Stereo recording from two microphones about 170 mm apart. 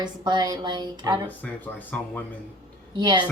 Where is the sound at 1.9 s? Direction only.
10° left (ahead or behind).